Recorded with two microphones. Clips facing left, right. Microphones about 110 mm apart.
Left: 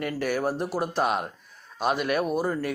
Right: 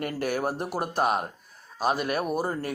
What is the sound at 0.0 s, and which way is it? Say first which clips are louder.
A man's voice: left 1 dB; 45° right (ahead or behind).